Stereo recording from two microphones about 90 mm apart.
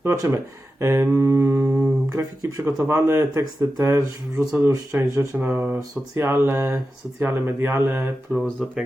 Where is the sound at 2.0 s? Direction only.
35° right (ahead or behind).